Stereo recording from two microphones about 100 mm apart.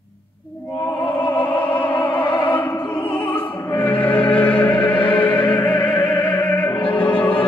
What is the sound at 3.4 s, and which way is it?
Music, 55° left (ahead or behind).